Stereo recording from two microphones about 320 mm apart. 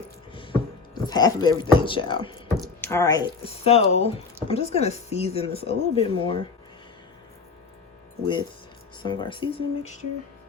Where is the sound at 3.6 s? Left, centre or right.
Centre.